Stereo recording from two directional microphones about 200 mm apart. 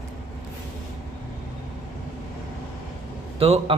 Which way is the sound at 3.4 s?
30° right (ahead or behind).